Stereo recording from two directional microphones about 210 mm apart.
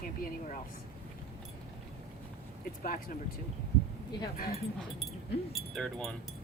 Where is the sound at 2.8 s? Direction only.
40° left (ahead or behind).